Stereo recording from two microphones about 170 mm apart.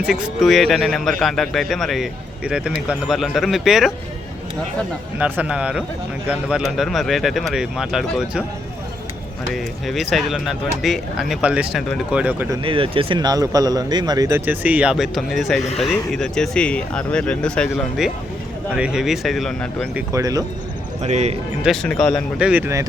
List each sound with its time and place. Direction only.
0.0 s speech: centre (ahead or behind)
5.2 s a man's voice: 5° right (ahead or behind)
9.5 s speech: centre (ahead or behind)
12.6 s speech: 30° right (ahead or behind); by 15.6 s centre (ahead or behind)
15.6 s speech: 40° left (ahead or behind)
15.9 s speech: 5° left (ahead or behind)
20.0 s speech: 20° right (ahead or behind)
21.0 s a man's voice: 40° right (ahead or behind)
21.6 s speech: centre (ahead or behind)
22.4 s a man's voice: 10° right (ahead or behind)